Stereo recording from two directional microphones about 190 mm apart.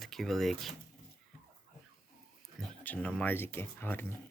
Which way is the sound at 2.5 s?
10° left (ahead or behind).